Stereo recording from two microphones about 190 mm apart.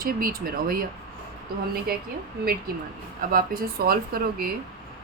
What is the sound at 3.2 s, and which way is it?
A woman's voice, 45° right (ahead or behind).